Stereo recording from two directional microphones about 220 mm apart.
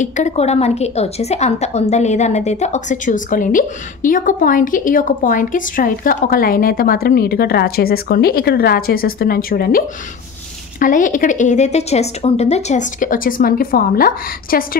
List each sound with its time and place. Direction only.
0.0 s a woman's voice: 35° left (ahead or behind)